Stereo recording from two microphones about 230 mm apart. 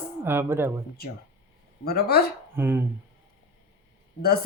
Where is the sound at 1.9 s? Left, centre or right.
Left.